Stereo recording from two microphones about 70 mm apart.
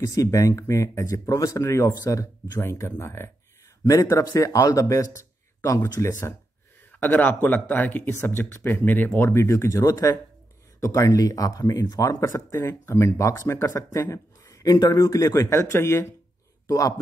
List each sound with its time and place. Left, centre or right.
0.0 s speech: left
2.6 s speech: left
3.8 s speech: left
6.9 s speech: left
15.5 s speech: left
16.6 s a man's voice: left